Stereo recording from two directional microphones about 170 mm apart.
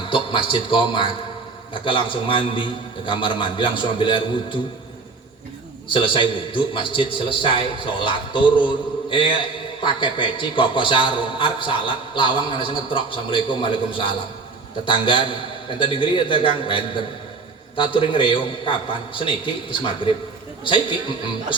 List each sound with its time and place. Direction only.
0.1 s a man's voice: 30° left (ahead or behind)
5.9 s a man's voice: 30° left (ahead or behind)
20.7 s a man's voice: 30° left (ahead or behind)